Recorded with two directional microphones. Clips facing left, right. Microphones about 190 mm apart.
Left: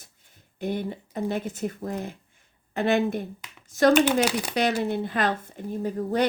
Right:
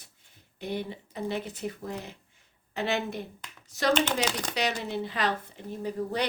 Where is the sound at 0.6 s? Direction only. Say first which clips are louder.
Left 5 dB; 50° left (ahead or behind).